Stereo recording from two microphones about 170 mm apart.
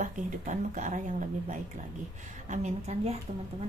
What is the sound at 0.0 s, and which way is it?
A woman's voice, 45° right (ahead or behind).